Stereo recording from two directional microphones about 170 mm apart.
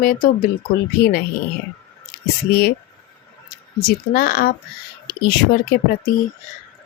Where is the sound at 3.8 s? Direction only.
60° left (ahead or behind).